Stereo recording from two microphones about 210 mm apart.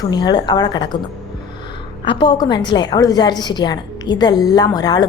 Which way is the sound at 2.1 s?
20° left (ahead or behind).